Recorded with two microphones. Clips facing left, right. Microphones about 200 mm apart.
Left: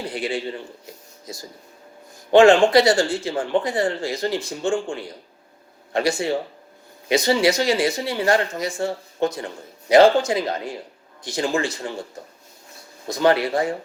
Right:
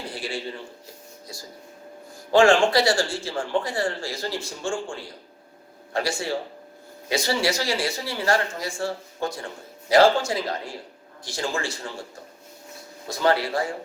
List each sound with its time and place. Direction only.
0.1 s a sound: 20° left (ahead or behind)
1.3 s speech: 20° left (ahead or behind)
13.1 s speech: 20° left (ahead or behind)